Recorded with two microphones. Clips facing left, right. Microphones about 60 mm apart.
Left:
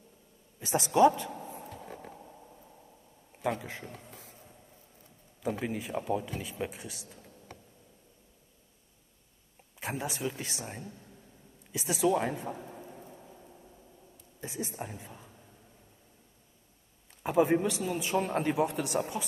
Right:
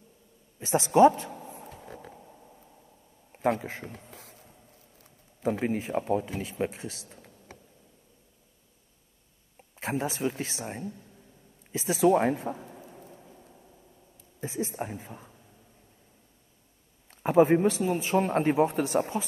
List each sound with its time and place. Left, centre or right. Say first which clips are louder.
0.6 s a man's voice: right 4 dB; right
1.3 s a sound: left 1 dB; left
1.7 s a sound: even; right
3.3 s speech: right 6 dB; right
5.4 s a man's voice: right 5 dB; right
9.8 s a man's voice: right 5 dB; right
12.6 s rain: left 1 dB; centre
14.4 s a woman's voice: right 6 dB; right
17.1 s a man's voice: right 5 dB; right